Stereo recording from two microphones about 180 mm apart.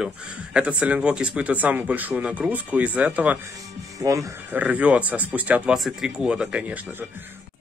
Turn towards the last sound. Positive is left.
turn(degrees=-5)  # may be behind; listen again after turning